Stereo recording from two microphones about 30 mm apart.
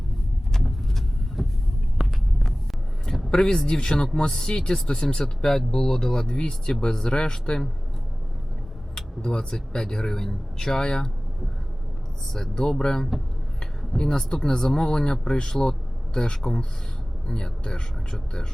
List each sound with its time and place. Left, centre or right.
1.4 s vehicle: centre
3.3 s a man's voice: centre
5.2 s a man's voice: centre
9.0 s a man's voice: left
12.3 s speech: centre
12.6 s a man's voice: left
13.6 s a sound: left
14.3 s a man's voice: left